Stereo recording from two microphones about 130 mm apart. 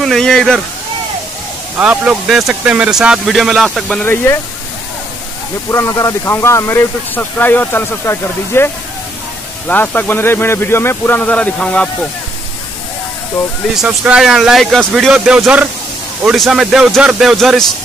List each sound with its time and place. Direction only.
0.0 s speech: 5° left (ahead or behind)
1.8 s speech: 5° right (ahead or behind)
4.0 s speech: 15° left (ahead or behind)
5.7 s speech: 20° left (ahead or behind)
13.7 s speech: 5° right (ahead or behind)